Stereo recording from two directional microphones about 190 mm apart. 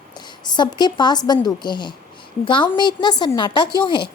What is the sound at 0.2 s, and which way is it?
A woman's voice, 25° left (ahead or behind).